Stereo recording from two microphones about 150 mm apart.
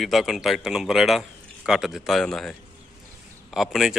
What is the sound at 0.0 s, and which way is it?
Speech, centre (ahead or behind).